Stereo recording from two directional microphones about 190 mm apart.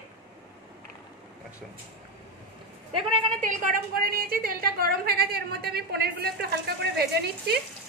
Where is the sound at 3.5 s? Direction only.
45° right (ahead or behind).